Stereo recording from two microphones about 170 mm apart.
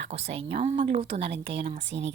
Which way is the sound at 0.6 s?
35° right (ahead or behind).